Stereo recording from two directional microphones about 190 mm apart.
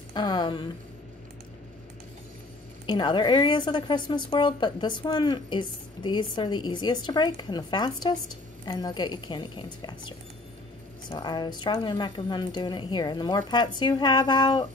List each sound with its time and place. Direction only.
0.1 s a woman's voice: 25° left (ahead or behind)
2.9 s a woman's voice: 25° left (ahead or behind)